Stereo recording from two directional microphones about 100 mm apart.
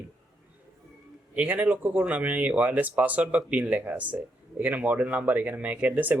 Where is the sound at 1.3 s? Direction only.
15° right (ahead or behind).